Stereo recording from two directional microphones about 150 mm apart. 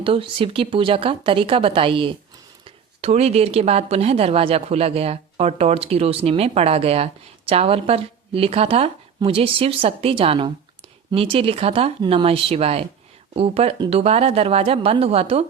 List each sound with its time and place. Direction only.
0.0 s speech: 35° right (ahead or behind)